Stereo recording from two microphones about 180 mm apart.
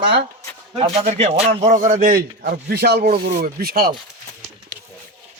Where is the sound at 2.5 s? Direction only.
65° right (ahead or behind).